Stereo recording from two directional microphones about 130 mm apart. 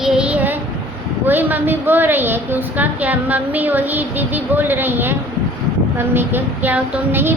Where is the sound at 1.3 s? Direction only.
15° right (ahead or behind).